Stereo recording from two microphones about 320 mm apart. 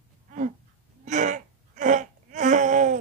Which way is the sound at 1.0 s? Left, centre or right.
Right.